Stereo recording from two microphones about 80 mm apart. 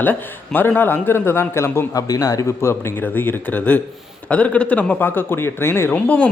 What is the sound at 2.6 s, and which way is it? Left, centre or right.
A man's voice, left.